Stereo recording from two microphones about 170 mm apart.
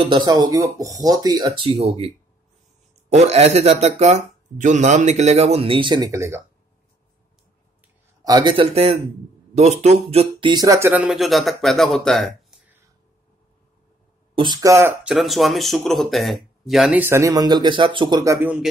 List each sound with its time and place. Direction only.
0.0 s speech: 25° right (ahead or behind)
8.2 s speech: 25° right (ahead or behind); by 12.5 s centre (ahead or behind)
14.3 s speech: 25° right (ahead or behind)
15.0 s speech: centre (ahead or behind); by 18.5 s 20° right (ahead or behind)